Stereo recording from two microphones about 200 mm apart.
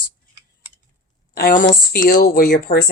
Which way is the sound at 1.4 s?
50° left (ahead or behind).